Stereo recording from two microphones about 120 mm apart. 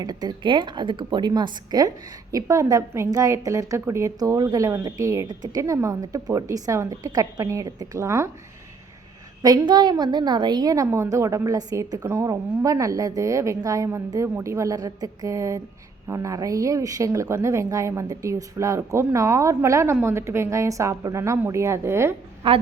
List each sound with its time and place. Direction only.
0.0 s a woman's voice: 35° right (ahead or behind)
9.4 s a woman's voice: 35° right (ahead or behind)
22.4 s a woman's voice: 50° right (ahead or behind)